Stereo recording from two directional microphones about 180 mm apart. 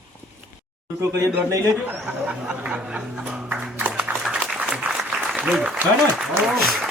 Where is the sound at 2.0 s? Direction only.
5° right (ahead or behind).